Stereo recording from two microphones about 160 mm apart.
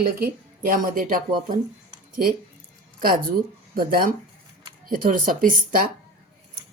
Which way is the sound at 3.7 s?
70° right (ahead or behind).